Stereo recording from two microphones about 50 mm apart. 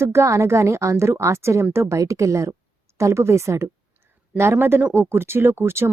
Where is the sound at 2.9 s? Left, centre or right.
Right.